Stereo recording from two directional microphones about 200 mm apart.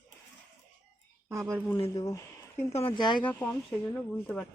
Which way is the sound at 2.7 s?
25° left (ahead or behind).